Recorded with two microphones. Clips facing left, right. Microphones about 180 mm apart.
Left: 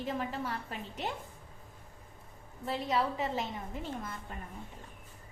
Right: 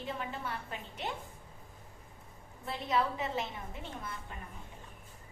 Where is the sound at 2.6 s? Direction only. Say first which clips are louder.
Left 1 dB; 35° left (ahead or behind).